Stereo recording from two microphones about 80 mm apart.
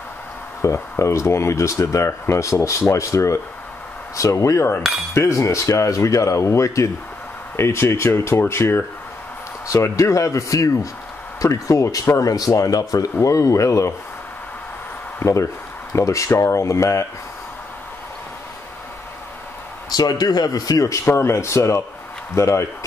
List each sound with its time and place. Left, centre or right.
0.6 s speech: left
15.1 s speech: left
19.9 s speech: left